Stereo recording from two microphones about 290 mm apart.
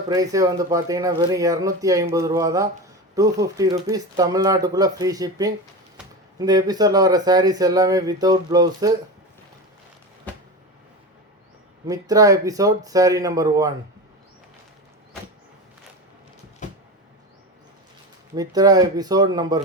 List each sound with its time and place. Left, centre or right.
0.1 s speech: centre
11.9 s speech: centre
16.6 s a sound: left
18.3 s speech: centre